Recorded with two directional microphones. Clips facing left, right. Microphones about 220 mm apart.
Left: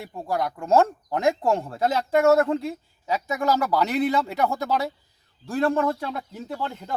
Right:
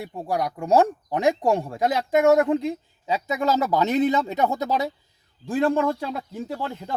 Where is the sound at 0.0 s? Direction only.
15° right (ahead or behind).